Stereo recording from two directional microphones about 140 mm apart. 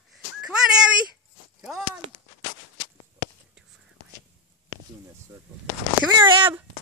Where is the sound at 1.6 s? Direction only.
Centre (ahead or behind).